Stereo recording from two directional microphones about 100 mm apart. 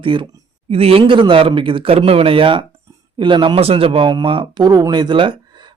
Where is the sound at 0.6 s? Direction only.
75° right (ahead or behind); by 3.6 s 55° right (ahead or behind).